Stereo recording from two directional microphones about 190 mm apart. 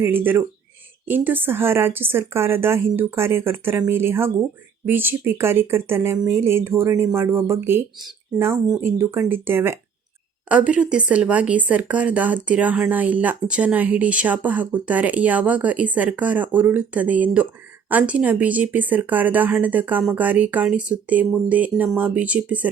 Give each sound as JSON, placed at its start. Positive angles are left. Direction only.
{"t": 0.0, "sound": "speech", "side_deg": -10}